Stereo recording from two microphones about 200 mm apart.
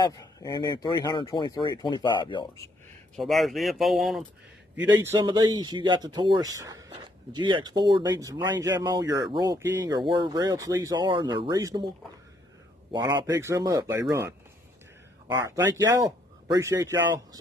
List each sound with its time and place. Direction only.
0.1 s speech: 20° left (ahead or behind)
3.2 s speech: centre (ahead or behind)
4.7 s a man's voice: 10° right (ahead or behind)
5.2 s speech: 20° right (ahead or behind)
12.9 s a man's voice: 20° right (ahead or behind)
15.2 s a man's voice: 15° right (ahead or behind)